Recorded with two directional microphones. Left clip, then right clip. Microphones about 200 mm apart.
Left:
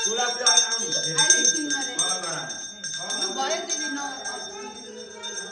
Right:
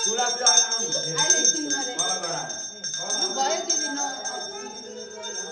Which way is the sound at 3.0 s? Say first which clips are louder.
Right 2 dB; 60° right (ahead or behind).